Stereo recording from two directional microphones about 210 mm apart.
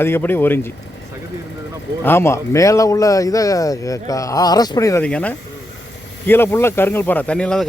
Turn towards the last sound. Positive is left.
turn(degrees=5)  # may be behind; listen again after turning